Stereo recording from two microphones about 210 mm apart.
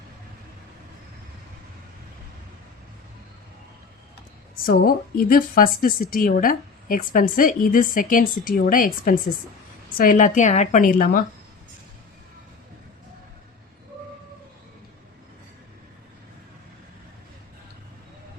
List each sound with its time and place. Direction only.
4.6 s speech: 45° left (ahead or behind)